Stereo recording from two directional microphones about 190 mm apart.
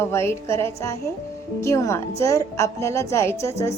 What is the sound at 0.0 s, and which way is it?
A woman's voice, 15° left (ahead or behind).